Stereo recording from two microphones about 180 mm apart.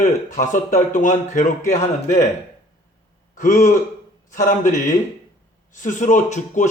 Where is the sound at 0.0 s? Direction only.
45° left (ahead or behind).